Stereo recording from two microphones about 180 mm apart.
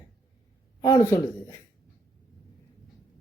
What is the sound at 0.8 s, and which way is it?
Speech, 20° left (ahead or behind).